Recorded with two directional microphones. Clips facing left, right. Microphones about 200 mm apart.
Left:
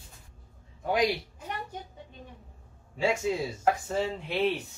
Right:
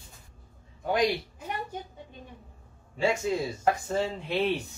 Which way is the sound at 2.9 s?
5° left (ahead or behind).